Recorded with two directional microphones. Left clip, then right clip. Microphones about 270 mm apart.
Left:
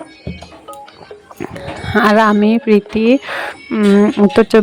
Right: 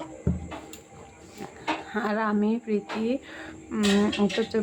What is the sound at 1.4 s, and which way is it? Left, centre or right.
Speech, left.